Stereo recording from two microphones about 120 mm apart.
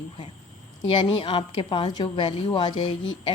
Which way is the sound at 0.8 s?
45° left (ahead or behind).